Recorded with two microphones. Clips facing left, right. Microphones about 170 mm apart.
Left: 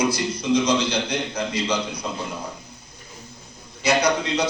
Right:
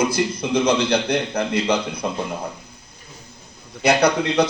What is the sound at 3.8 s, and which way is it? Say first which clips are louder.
Speech: right 3 dB; 60° right (ahead or behind).